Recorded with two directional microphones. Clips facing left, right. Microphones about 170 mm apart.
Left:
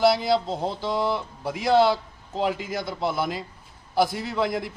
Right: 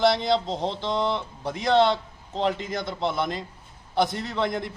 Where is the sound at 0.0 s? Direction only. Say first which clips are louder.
Left 1 dB; 5° left (ahead or behind).